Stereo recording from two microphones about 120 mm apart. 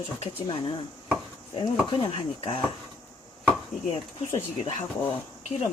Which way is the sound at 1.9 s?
45° left (ahead or behind).